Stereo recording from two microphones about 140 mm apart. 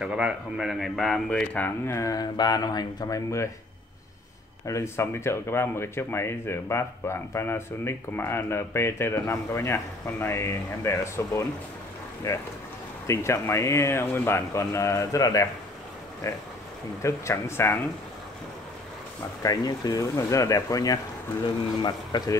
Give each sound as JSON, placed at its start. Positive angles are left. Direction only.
{"t": 0.0, "sound": "a man's voice", "side_deg": -5}
{"t": 4.6, "sound": "speech", "side_deg": 20}
{"t": 19.4, "sound": "speech", "side_deg": 30}